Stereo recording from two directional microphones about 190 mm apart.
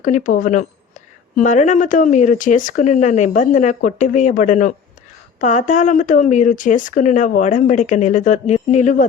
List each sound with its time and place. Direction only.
0.0 s speech: 45° left (ahead or behind)